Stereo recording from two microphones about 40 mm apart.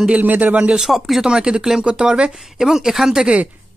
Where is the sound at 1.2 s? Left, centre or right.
Right.